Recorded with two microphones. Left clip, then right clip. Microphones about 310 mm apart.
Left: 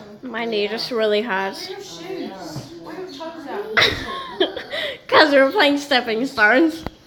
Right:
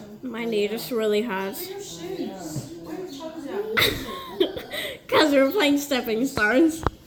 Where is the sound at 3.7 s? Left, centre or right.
Centre.